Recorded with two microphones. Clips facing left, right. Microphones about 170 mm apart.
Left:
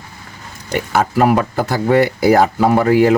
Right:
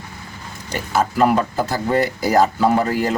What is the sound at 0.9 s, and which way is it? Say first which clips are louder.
Speech: left 2 dB; 60° left (ahead or behind).